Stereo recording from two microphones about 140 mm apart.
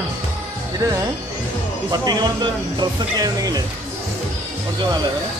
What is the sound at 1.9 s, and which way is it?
Speech, 30° right (ahead or behind).